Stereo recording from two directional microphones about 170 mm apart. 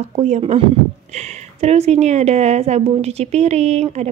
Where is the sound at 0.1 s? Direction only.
40° right (ahead or behind).